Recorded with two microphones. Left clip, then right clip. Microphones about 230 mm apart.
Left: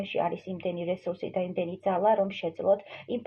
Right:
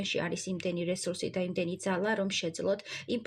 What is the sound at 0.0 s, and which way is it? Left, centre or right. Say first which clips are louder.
Speech: left 4 dB; right.